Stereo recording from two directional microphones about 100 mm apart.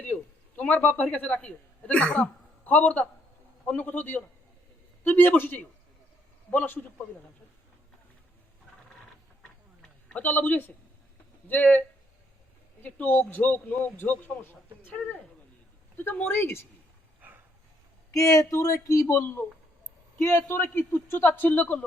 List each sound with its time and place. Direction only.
0.0 s a man's voice: 15° left (ahead or behind)
10.1 s a man's voice: 15° left (ahead or behind)
17.2 s a sound: 20° right (ahead or behind)
18.1 s a man's voice: 35° left (ahead or behind); by 21.8 s 15° left (ahead or behind)